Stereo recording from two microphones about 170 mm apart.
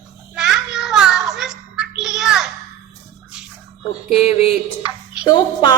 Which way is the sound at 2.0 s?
5° right (ahead or behind).